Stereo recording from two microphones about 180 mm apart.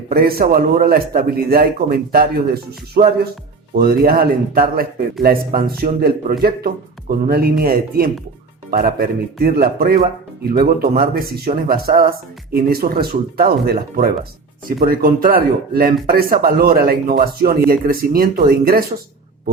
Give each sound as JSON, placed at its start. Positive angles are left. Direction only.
{"t": 0.1, "sound": "a man's voice", "side_deg": -55}